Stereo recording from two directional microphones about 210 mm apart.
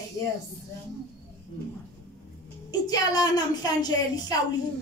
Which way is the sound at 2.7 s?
20° left (ahead or behind).